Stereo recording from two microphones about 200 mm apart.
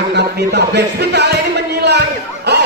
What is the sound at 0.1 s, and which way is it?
Music, 55° right (ahead or behind).